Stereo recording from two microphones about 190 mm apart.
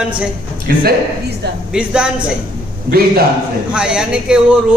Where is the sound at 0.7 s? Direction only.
50° right (ahead or behind).